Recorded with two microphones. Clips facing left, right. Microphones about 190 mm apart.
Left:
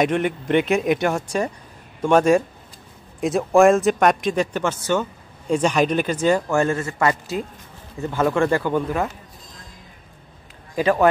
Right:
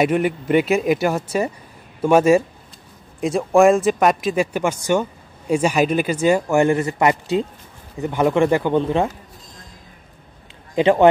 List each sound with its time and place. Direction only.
0.0 s a man's voice: 5° right (ahead or behind); by 9.1 s 25° right (ahead or behind)
10.7 s a man's voice: 25° right (ahead or behind)